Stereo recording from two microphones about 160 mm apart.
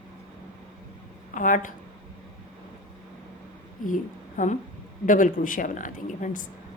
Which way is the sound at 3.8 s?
55° left (ahead or behind).